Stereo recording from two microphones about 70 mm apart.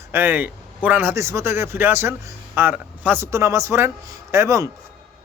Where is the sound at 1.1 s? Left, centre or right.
Right.